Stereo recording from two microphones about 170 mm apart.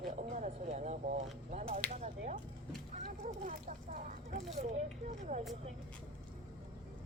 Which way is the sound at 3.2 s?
50° right (ahead or behind).